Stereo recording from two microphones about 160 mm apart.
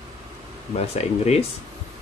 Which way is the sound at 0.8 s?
40° left (ahead or behind).